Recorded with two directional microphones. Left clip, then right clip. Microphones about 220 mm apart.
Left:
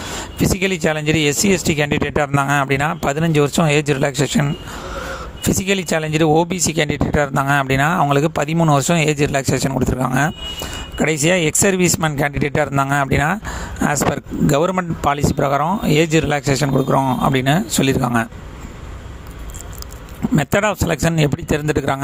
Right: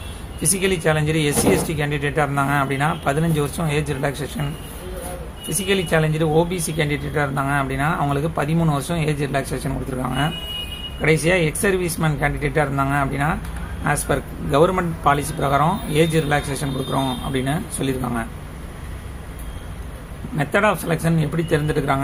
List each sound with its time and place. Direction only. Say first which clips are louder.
0.4 s speech: left 2 dB; 45° left (ahead or behind)
5.5 s speech: right 1 dB; 50° left (ahead or behind)
20.3 s speech: left 1 dB; 50° left (ahead or behind)